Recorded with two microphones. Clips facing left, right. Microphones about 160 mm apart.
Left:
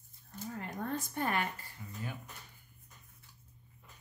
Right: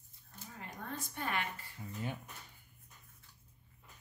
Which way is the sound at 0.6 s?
50° left (ahead or behind).